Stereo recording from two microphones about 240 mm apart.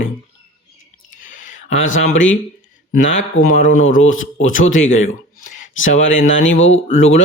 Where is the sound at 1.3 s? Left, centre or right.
Left.